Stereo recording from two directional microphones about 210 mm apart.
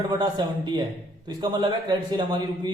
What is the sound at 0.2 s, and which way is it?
A man's voice, 20° right (ahead or behind).